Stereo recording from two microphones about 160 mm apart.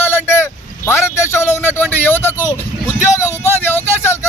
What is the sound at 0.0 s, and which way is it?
Vehicle, 15° left (ahead or behind).